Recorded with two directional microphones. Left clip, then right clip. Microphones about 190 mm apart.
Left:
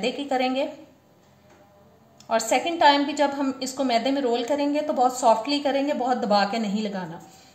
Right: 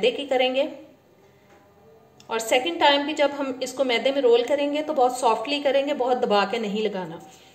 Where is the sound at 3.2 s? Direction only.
30° right (ahead or behind).